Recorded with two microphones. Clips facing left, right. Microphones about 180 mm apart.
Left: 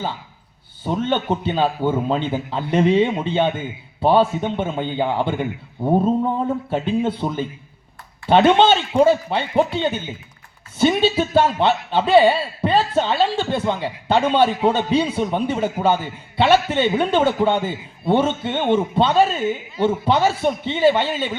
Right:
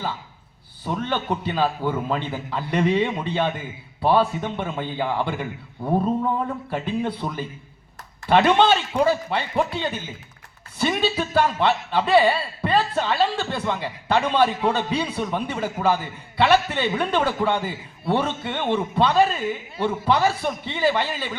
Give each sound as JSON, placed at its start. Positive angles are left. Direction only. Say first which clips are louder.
{"t": 0.9, "sound": "a man's voice", "louder": "left 5 dB", "side_deg": 30}